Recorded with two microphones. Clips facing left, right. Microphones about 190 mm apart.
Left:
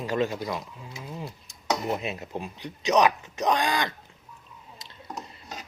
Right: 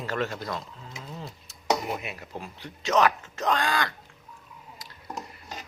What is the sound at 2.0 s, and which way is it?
Speech, 25° left (ahead or behind).